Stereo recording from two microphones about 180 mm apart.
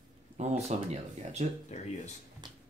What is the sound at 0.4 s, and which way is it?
Speech, 40° right (ahead or behind).